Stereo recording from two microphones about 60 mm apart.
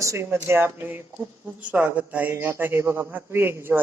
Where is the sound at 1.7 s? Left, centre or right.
Right.